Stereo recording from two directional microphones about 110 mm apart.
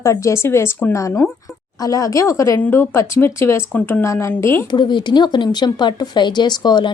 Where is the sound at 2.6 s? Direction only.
20° left (ahead or behind).